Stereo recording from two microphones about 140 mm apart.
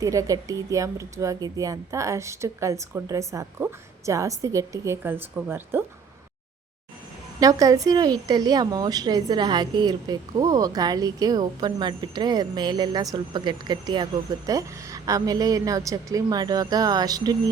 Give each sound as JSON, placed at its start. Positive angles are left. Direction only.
{"t": 0.0, "sound": "speech", "side_deg": -25}
{"t": 7.3, "sound": "speech", "side_deg": -25}